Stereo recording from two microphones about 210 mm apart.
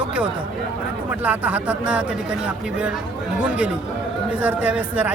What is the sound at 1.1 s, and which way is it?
Speech, 5° right (ahead or behind).